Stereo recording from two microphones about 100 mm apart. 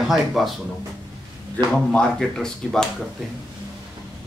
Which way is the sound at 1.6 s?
15° left (ahead or behind).